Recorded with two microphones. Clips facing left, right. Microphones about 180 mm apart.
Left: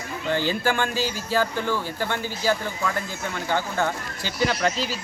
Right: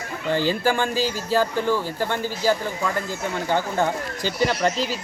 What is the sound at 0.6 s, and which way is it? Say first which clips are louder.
Speech: right 2 dB; 10° right (ahead or behind).